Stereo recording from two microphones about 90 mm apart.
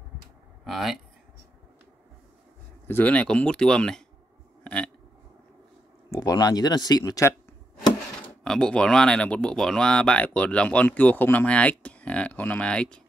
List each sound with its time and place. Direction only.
0.7 s speech: centre (ahead or behind)
2.9 s speech: 15° left (ahead or behind)
4.6 s a sound: 10° left (ahead or behind)
6.0 s a sound: 40° left (ahead or behind)
6.3 s speech: 50° left (ahead or behind)
8.5 s speech: 10° left (ahead or behind)